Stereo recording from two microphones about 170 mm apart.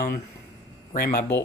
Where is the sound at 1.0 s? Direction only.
60° left (ahead or behind).